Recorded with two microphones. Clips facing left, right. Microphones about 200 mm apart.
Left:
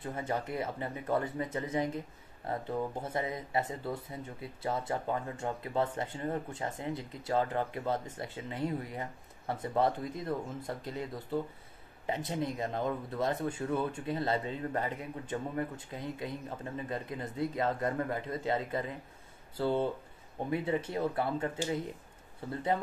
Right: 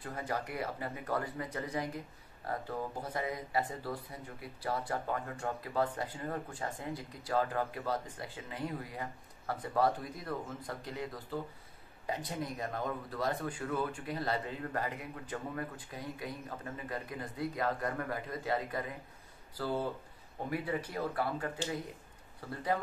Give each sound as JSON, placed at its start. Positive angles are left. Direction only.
{"t": 0.0, "sound": "speech", "side_deg": 25}